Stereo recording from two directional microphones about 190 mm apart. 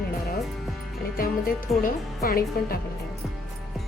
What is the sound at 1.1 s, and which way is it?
Speech, 50° left (ahead or behind).